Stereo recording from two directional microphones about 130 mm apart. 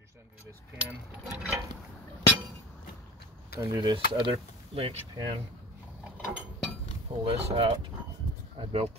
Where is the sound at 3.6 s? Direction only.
30° right (ahead or behind).